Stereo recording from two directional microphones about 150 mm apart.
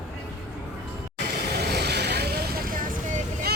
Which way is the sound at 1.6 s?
90° right.